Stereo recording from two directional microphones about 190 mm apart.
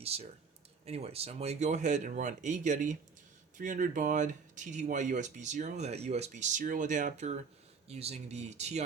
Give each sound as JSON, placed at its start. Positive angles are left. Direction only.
{"t": 0.0, "sound": "speech", "side_deg": -30}